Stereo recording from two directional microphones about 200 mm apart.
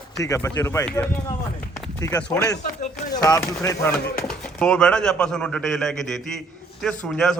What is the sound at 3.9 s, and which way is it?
A man's voice, 5° left (ahead or behind).